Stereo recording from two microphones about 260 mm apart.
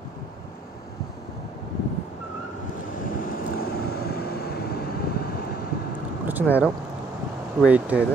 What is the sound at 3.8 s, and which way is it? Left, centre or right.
Vehicle, left.